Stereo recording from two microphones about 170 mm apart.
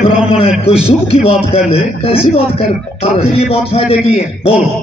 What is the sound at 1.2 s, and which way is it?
A man's voice, 35° left (ahead or behind).